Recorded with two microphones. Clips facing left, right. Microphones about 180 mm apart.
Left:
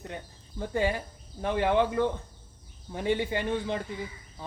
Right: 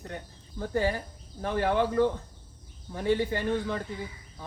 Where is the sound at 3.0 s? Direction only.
15° left (ahead or behind).